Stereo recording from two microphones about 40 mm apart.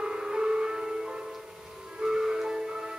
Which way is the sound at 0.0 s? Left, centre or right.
Centre.